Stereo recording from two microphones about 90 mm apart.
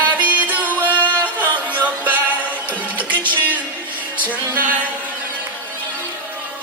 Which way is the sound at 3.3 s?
20° left (ahead or behind).